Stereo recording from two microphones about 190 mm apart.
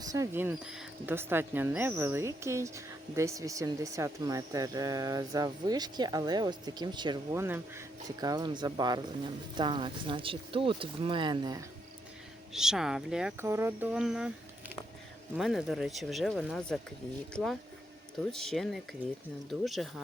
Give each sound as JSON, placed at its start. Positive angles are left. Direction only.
{"t": 0.0, "sound": "speech", "side_deg": -15}
{"t": 7.4, "sound": "speech", "side_deg": -15}
{"t": 12.5, "sound": "speech", "side_deg": -5}
{"t": 15.4, "sound": "speech", "side_deg": 0}